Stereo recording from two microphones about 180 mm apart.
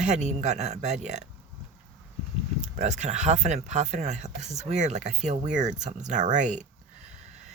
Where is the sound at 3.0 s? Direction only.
40° right (ahead or behind).